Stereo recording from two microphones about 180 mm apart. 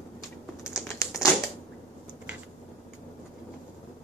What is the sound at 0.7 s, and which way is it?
Crumpling, 15° left (ahead or behind).